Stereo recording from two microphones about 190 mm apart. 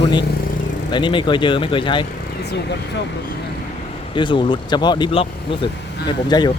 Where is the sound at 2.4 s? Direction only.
60° left (ahead or behind).